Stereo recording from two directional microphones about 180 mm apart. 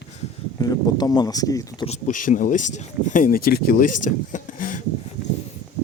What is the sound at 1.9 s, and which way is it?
Speech, 45° left (ahead or behind).